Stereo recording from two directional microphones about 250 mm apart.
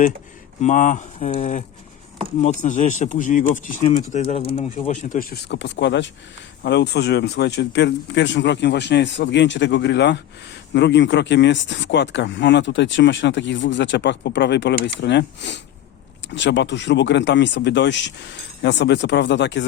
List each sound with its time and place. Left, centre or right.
0.6 s speech: left